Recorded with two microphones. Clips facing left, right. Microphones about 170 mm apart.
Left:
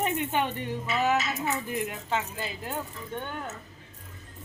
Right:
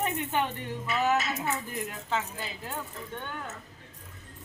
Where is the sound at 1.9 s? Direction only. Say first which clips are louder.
Left 1 dB; 15° left (ahead or behind).